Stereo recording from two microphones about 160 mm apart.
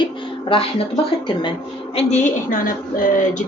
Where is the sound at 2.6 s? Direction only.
60° left (ahead or behind).